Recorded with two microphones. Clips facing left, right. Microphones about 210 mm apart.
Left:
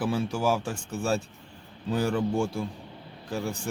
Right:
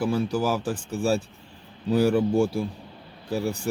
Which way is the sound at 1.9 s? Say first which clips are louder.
Right 6 dB; 10° right (ahead or behind).